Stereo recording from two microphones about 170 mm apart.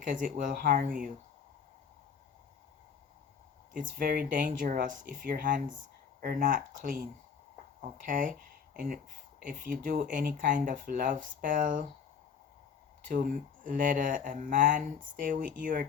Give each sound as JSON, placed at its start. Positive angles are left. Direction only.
{"t": 0.1, "sound": "speech", "side_deg": -50}
{"t": 3.7, "sound": "speech", "side_deg": -50}
{"t": 13.1, "sound": "speech", "side_deg": -55}